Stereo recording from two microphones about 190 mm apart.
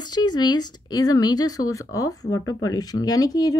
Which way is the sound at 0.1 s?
20° left (ahead or behind).